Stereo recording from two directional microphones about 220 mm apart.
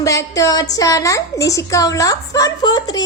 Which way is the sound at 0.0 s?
15° left (ahead or behind).